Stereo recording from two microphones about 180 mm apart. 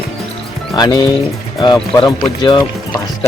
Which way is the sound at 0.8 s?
25° left (ahead or behind).